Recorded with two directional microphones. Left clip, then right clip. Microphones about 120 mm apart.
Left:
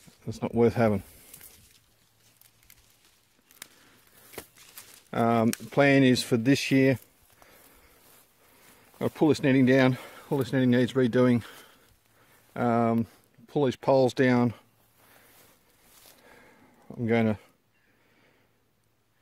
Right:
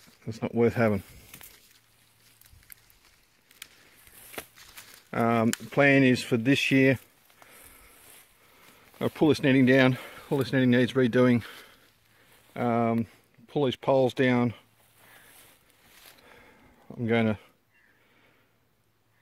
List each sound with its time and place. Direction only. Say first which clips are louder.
0.2 s speech: left 1 dB; 25° left (ahead or behind)
5.1 s speech: left 1 dB; 25° left (ahead or behind)
8.9 s speech: even; 10° left (ahead or behind)
12.5 s speech: left 1 dB; 30° left (ahead or behind)
16.1 s a sound: even; 20° left (ahead or behind)